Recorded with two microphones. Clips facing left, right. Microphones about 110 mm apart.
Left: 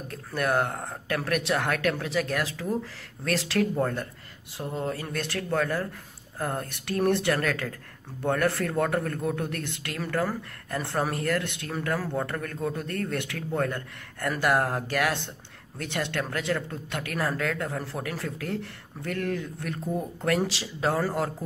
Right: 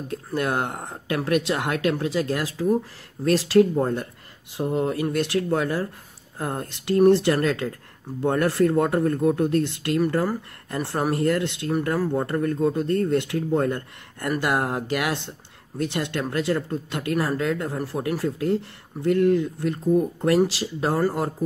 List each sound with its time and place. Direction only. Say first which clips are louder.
0.1 s speech: right 1 dB; 20° right (ahead or behind)